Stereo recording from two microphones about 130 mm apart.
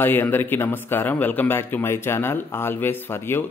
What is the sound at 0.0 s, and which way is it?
A man's voice, 15° left (ahead or behind).